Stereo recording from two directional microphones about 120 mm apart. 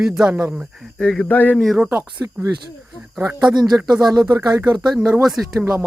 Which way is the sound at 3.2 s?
15° right (ahead or behind).